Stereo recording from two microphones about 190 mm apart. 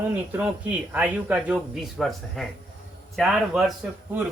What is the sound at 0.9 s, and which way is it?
Speech, 5° right (ahead or behind).